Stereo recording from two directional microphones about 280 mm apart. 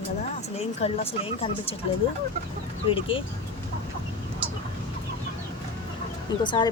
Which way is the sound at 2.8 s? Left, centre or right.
Centre.